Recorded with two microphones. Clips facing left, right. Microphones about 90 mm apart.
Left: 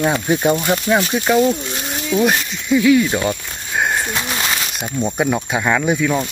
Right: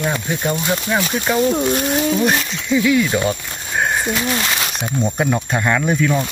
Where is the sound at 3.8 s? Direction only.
Centre (ahead or behind).